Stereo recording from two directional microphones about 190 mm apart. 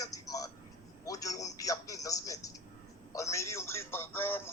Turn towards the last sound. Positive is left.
turn(degrees=10)  # may be behind; listen again after turning